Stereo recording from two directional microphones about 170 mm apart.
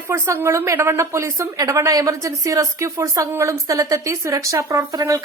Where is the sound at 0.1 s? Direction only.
15° right (ahead or behind).